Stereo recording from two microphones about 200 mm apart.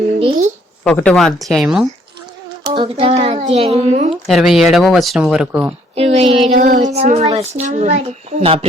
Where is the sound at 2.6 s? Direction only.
20° right (ahead or behind).